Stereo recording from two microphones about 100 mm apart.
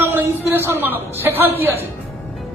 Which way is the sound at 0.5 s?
25° right (ahead or behind).